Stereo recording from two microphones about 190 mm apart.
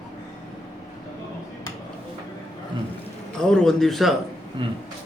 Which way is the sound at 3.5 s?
Centre (ahead or behind).